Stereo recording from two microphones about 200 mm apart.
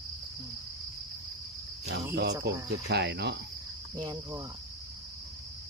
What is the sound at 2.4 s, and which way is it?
Speech, 60° right (ahead or behind).